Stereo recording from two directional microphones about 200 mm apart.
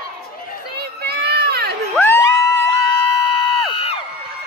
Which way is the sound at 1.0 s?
55° right (ahead or behind).